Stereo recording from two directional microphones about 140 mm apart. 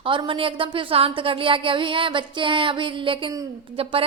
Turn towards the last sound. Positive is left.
turn(degrees=-40)  # may be behind; listen again after turning